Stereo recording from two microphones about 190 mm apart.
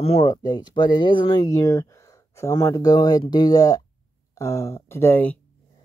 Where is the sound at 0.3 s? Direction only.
20° left (ahead or behind).